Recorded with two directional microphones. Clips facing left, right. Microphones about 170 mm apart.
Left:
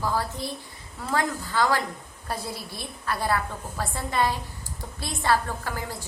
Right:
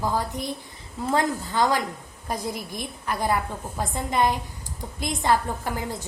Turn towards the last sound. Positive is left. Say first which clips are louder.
# right 2 dB
turn(degrees=-20)  # may be behind; listen again after turning